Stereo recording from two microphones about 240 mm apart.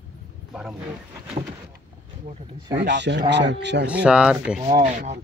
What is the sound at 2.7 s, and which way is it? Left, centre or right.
Speech, right.